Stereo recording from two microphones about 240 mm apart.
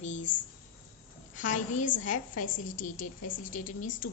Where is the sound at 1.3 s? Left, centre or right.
Left.